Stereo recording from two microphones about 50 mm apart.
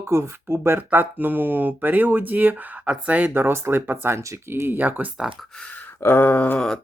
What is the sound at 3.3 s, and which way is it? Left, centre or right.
Speech, right.